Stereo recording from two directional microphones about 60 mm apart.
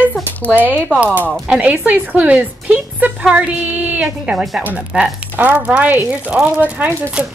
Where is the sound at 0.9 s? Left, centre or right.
Left.